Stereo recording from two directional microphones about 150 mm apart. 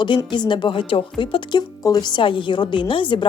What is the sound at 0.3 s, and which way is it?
A woman's voice, 30° left (ahead or behind).